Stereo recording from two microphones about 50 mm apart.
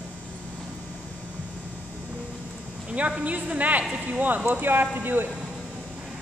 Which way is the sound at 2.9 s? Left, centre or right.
Right.